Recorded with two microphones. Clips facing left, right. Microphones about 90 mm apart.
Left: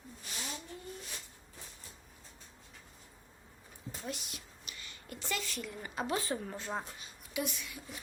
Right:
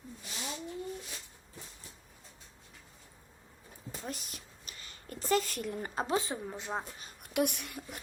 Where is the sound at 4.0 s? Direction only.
40° right (ahead or behind).